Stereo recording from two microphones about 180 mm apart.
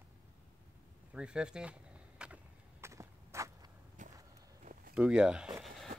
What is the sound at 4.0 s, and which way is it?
Walk, 45° right (ahead or behind).